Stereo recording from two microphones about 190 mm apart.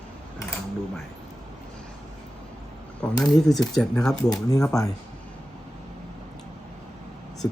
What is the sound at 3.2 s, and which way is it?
Speech, centre (ahead or behind).